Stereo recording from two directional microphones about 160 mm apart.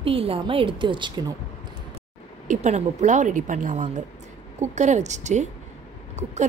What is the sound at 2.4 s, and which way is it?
A woman's voice, 45° right (ahead or behind).